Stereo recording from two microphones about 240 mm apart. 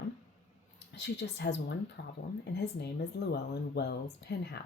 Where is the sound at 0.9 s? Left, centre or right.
Left.